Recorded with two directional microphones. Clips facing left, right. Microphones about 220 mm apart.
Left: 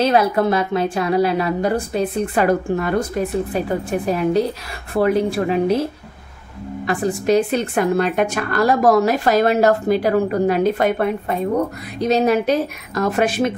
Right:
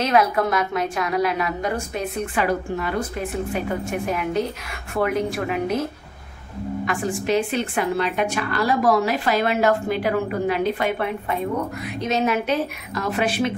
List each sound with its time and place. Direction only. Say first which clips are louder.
0.0 s a woman's voice: left 3 dB; 30° left (ahead or behind)
2.4 s a woman's voice: left 5 dB; 45° left (ahead or behind); by 5.9 s 30° left (ahead or behind)
6.9 s a woman's voice: left 6 dB; 35° left (ahead or behind)